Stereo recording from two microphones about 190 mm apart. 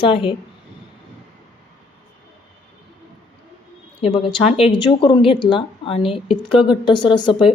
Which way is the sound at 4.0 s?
30° left (ahead or behind).